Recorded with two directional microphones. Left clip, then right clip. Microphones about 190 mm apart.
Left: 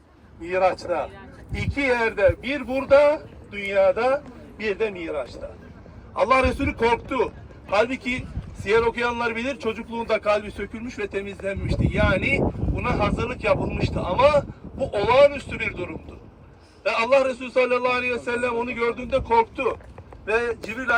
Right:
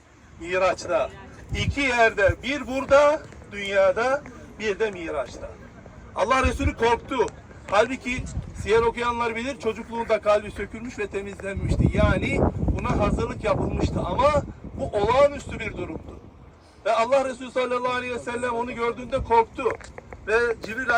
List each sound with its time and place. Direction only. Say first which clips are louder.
0.9 s a man's voice: right 2 dB; 5° left (ahead or behind)
6.1 s a man's voice: left 3 dB; centre (ahead or behind)
20.2 s a man's voice: right 1 dB; 15° left (ahead or behind)